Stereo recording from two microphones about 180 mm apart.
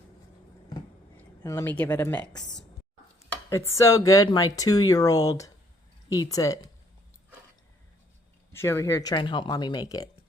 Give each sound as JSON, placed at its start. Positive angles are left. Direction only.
{"t": 1.1, "sound": "speech", "side_deg": 10}
{"t": 8.5, "sound": "speech", "side_deg": 15}